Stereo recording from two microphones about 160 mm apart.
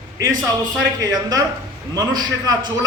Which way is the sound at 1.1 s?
20° right (ahead or behind).